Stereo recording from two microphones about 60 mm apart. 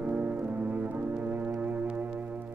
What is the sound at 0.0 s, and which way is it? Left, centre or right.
Music, right.